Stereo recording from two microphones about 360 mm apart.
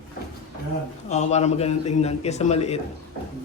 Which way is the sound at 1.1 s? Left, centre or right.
Centre.